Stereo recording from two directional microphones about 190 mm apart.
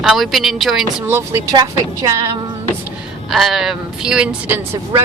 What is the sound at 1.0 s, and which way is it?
Speech, 15° right (ahead or behind).